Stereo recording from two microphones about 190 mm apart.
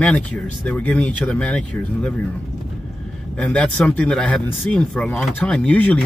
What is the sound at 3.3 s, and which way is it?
Speech, 5° left (ahead or behind).